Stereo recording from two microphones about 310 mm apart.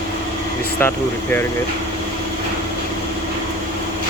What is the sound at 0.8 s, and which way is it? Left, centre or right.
Speech, centre.